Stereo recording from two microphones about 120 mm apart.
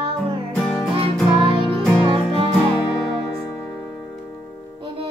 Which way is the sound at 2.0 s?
45° right (ahead or behind).